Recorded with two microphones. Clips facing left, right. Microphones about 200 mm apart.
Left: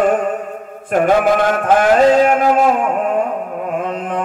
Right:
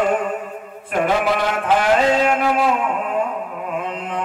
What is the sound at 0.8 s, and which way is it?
Music, 45° left (ahead or behind).